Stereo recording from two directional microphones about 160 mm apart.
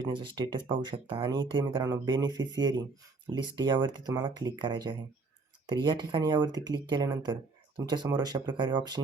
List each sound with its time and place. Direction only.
0.0 s speech: 30° right (ahead or behind)